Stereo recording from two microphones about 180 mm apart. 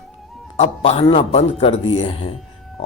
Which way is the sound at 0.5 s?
40° left (ahead or behind).